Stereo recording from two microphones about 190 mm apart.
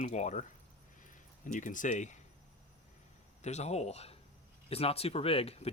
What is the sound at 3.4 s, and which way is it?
Speech, 35° left (ahead or behind).